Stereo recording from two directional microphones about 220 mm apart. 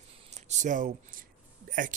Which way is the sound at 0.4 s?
35° right (ahead or behind).